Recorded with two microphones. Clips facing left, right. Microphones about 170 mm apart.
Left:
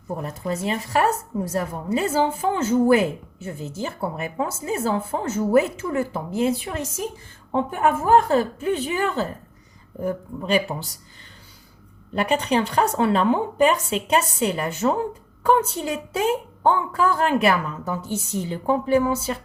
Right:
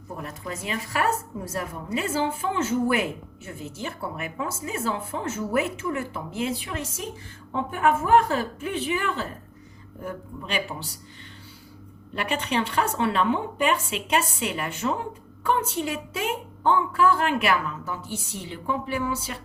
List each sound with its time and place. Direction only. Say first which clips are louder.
0.2 s speech: left 6 dB; 35° left (ahead or behind)
12.1 s speech: left 5 dB; 35° left (ahead or behind)